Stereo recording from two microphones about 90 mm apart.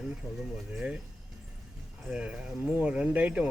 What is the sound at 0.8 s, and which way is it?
Speech, 10° right (ahead or behind).